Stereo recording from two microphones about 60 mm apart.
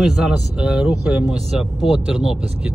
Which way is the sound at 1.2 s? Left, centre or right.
Centre.